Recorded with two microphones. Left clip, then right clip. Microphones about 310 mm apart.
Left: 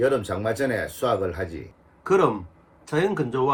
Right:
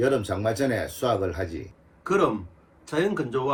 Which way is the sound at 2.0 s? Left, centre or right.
Left.